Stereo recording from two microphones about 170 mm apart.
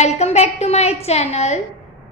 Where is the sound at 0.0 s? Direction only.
40° left (ahead or behind).